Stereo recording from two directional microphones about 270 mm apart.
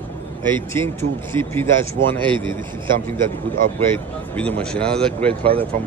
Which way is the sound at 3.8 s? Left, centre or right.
Centre.